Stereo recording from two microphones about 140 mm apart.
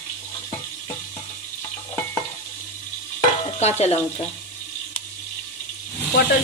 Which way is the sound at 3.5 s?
50° left (ahead or behind).